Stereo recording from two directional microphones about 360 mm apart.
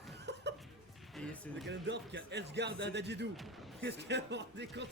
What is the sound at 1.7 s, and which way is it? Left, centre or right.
Speech, right.